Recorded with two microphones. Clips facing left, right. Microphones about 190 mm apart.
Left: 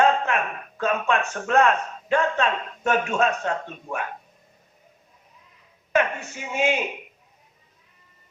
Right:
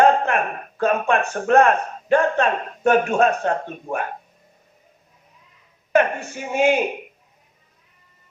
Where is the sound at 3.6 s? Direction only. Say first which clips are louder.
Right 5 dB; 35° right (ahead or behind).